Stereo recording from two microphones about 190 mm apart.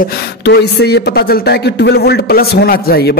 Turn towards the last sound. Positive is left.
turn(degrees=55)  # may be behind; listen again after turning